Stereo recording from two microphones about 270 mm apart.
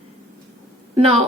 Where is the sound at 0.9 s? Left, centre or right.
Right.